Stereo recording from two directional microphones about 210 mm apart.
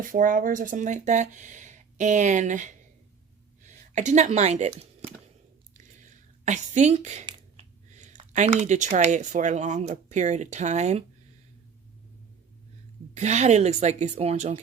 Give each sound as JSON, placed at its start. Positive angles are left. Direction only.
{"t": 0.0, "sound": "speech", "side_deg": -40}
{"t": 5.7, "sound": "a sound", "side_deg": -35}
{"t": 7.3, "sound": "speech", "side_deg": -30}
{"t": 13.1, "sound": "speech", "side_deg": -30}